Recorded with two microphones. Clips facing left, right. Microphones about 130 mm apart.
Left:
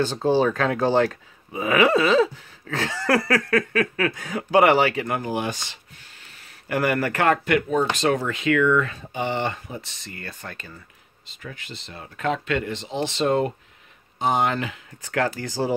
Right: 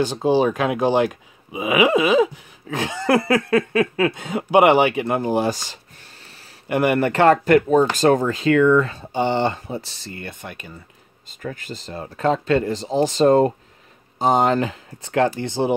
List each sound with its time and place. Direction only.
0.0 s speech: 15° right (ahead or behind); by 5.8 s 40° right (ahead or behind)
6.7 s speech: 20° right (ahead or behind)
10.2 s speech: 20° right (ahead or behind)
11.2 s speech: 45° right (ahead or behind); by 15.7 s 25° right (ahead or behind)